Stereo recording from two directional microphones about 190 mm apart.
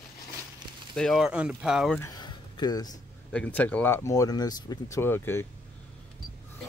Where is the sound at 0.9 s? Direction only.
Centre (ahead or behind).